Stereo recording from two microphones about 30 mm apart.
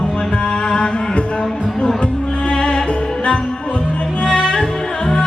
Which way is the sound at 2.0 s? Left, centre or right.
Left.